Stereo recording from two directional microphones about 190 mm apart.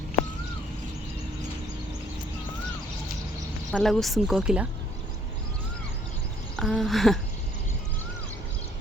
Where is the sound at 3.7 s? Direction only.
Centre (ahead or behind).